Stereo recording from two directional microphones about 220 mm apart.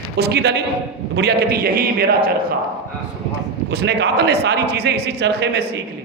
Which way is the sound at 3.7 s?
50° right (ahead or behind).